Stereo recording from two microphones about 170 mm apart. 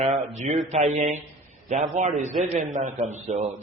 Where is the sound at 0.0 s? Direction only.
40° right (ahead or behind).